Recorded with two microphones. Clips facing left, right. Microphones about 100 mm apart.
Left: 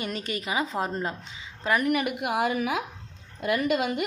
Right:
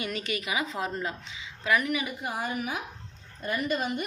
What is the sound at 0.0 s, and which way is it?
A woman's voice, 40° left (ahead or behind).